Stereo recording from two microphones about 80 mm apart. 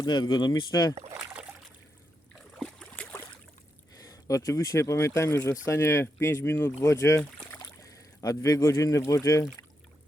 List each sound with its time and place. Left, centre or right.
0.0 s speech: left
2.3 s a sound: centre
3.9 s speech: left